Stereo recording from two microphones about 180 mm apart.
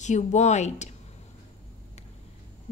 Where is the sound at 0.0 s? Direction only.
40° left (ahead or behind).